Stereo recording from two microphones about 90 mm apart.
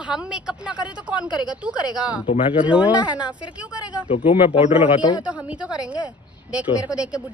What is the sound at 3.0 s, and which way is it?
Speech, 55° left (ahead or behind).